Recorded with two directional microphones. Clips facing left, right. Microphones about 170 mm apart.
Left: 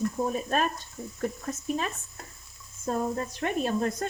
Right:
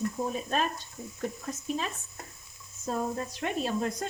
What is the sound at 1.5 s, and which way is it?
Speech, 50° left (ahead or behind).